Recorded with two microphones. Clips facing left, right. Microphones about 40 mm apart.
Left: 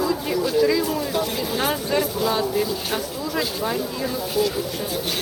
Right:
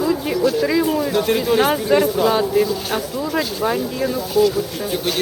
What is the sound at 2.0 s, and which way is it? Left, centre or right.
Speech, right.